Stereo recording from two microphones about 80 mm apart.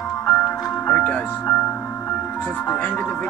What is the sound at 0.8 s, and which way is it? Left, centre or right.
Music, centre.